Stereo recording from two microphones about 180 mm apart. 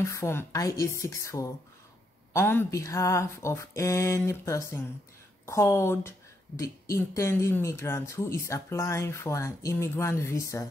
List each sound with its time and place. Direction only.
0.0 s speech: 15° left (ahead or behind)